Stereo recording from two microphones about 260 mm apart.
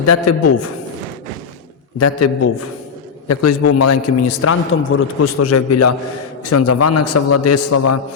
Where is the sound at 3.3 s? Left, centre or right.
Left.